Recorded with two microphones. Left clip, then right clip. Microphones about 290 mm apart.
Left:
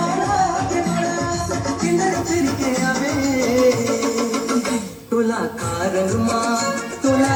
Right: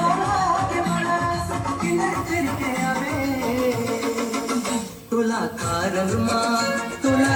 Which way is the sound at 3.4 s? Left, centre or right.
Right.